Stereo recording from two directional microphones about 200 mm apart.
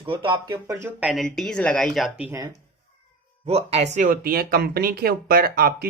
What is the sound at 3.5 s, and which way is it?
Speech, 30° right (ahead or behind).